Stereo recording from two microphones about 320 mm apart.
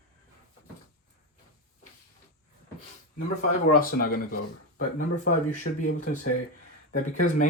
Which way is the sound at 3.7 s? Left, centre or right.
Left.